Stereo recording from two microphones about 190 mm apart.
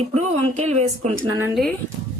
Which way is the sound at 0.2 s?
35° right (ahead or behind).